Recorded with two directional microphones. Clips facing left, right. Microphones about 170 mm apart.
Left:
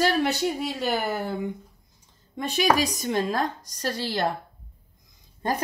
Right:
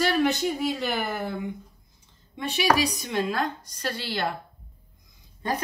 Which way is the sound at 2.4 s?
45° left (ahead or behind).